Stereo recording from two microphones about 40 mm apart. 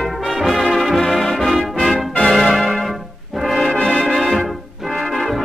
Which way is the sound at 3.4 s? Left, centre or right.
Centre.